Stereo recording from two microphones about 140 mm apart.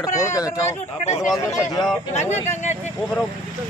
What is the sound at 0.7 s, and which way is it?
Speech, 55° left (ahead or behind).